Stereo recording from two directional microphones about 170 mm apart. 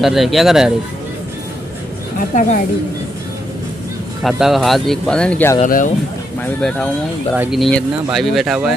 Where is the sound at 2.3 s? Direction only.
50° left (ahead or behind).